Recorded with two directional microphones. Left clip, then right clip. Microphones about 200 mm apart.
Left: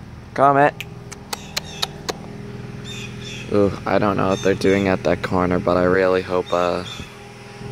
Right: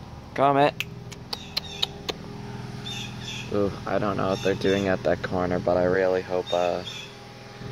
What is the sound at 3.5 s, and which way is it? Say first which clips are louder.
Speech: left 8 dB; 25° left (ahead or behind).